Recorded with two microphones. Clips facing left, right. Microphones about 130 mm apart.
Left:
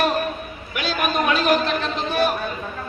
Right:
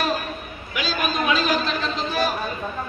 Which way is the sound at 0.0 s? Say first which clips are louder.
Left 4 dB; 60° left (ahead or behind).